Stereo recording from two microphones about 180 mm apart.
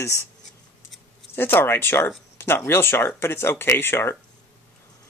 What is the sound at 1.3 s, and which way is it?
Speech, 10° left (ahead or behind).